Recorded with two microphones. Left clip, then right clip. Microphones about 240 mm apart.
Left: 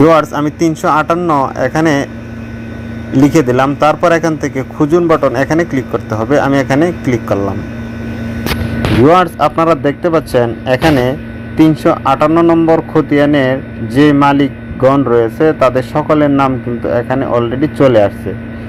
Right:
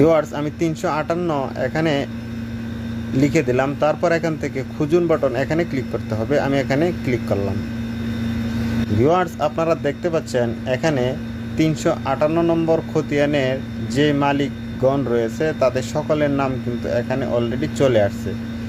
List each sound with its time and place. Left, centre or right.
0.0 s a man's voice: centre
3.3 s a man's voice: centre
9.0 s a man's voice: centre